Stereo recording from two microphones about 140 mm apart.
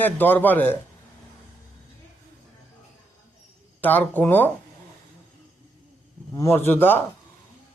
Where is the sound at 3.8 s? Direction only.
10° left (ahead or behind).